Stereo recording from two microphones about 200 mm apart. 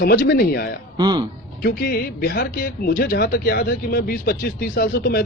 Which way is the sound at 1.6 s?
50° left (ahead or behind).